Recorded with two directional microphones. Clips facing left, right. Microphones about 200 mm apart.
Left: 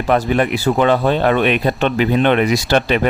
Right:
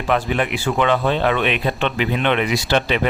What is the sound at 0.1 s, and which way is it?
Speech, 45° left (ahead or behind).